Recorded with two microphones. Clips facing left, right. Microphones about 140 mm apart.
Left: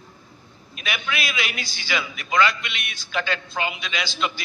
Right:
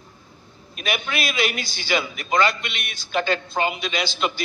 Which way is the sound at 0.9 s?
45° right (ahead or behind).